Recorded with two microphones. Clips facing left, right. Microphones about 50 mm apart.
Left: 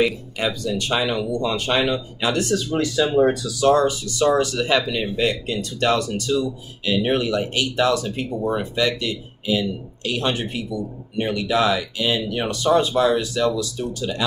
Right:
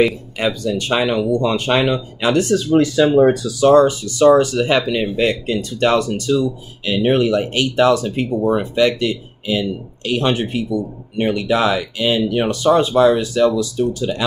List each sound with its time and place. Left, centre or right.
0.4 s speech: right
1.5 s speech: right
1.9 s speech: right